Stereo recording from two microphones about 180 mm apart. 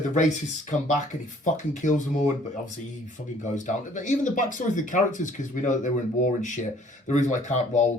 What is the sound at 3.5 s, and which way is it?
Speech, 45° left (ahead or behind).